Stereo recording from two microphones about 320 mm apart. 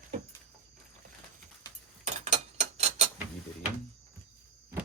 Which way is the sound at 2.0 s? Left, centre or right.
Right.